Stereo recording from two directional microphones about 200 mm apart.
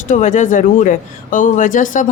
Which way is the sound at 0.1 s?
40° left (ahead or behind).